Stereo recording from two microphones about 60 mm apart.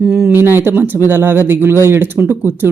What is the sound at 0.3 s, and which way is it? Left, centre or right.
Speech, right.